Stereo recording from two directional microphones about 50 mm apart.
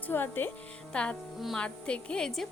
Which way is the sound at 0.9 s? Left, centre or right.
Left.